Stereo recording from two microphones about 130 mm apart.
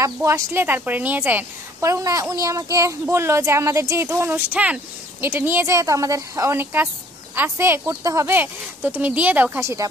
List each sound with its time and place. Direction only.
0.0 s a woman's voice: 20° right (ahead or behind)